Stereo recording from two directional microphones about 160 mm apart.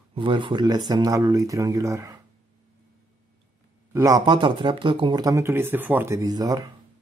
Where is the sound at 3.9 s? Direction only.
20° right (ahead or behind).